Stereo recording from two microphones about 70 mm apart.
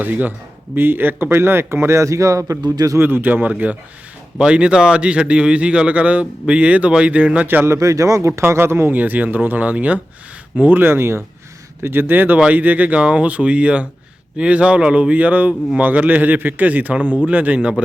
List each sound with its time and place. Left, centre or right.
0.0 s speech: right
2.6 s a man's voice: right
3.0 s speech: right
4.4 s a man's voice: centre
7.4 s a man's voice: right
8.4 s speech: right
9.0 s a man's voice: right